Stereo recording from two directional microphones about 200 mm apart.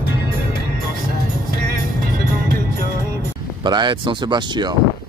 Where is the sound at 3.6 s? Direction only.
20° right (ahead or behind).